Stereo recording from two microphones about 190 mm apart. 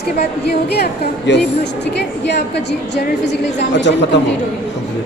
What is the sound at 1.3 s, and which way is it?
A woman's voice, 70° left (ahead or behind).